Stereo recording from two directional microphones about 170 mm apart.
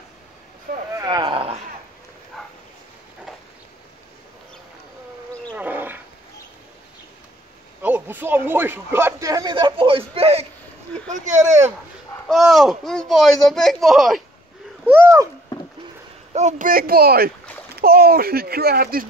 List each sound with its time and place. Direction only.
0.9 s a sound: 25° right (ahead or behind)
2.3 s bow-wow: centre (ahead or behind)
5.6 s dog: 10° right (ahead or behind)
7.8 s speech: 10° right (ahead or behind); by 10.4 s 35° right (ahead or behind)
11.1 s speech: 45° right (ahead or behind)
12.3 s speech: centre (ahead or behind)
14.9 s a sound: 15° right (ahead or behind)
16.3 s a child's voice: 45° right (ahead or behind); by 19.0 s 60° right (ahead or behind)